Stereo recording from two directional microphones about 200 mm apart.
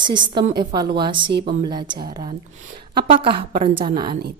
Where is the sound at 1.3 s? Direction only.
55° right (ahead or behind).